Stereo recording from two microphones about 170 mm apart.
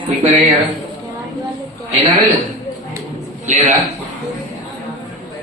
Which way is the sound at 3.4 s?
40° right (ahead or behind).